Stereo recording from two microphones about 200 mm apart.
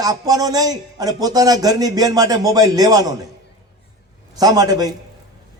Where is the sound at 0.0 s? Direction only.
20° right (ahead or behind).